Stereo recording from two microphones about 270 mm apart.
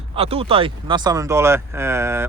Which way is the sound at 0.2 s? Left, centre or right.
Right.